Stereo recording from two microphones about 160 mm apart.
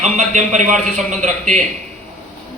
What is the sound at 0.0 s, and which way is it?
A man's voice, 50° right (ahead or behind).